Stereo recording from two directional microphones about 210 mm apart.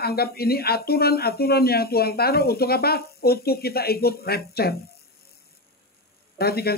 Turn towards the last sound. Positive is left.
turn(degrees=50)  # may be behind; listen again after turning